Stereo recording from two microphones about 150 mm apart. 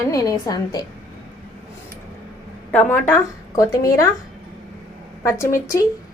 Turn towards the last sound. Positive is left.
turn(degrees=20)  # may be behind; listen again after turning